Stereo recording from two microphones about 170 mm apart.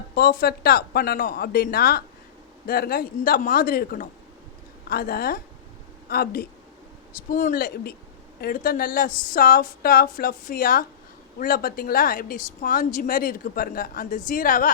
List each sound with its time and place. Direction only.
0.1 s a woman's voice: 60° left (ahead or behind)
7.3 s a woman's voice: 50° left (ahead or behind)